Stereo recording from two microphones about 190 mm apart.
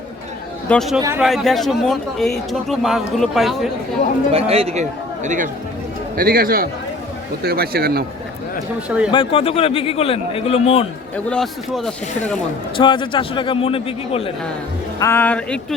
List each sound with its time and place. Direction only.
0.7 s a man's voice: centre (ahead or behind)
4.3 s speech: 30° right (ahead or behind)
6.1 s a man's voice: 50° right (ahead or behind)
9.1 s a man's voice: 30° left (ahead or behind)
11.3 s a man's voice: centre (ahead or behind)
12.7 s a man's voice: 25° left (ahead or behind)
14.9 s speech: 15° left (ahead or behind)